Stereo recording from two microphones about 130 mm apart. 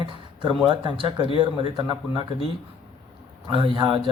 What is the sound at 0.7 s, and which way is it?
Speech, 40° right (ahead or behind).